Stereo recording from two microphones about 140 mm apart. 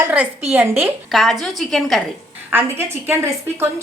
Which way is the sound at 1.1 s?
Centre (ahead or behind).